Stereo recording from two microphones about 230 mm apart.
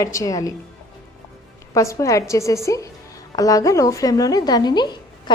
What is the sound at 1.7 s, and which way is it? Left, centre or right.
A woman's voice, centre.